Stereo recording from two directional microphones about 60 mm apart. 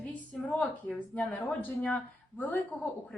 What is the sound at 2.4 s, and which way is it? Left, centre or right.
Speech, left.